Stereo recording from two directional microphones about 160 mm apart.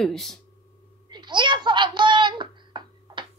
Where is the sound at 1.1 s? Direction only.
30° right (ahead or behind).